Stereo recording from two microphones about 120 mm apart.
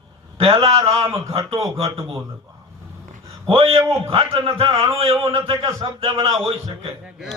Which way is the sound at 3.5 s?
55° right (ahead or behind).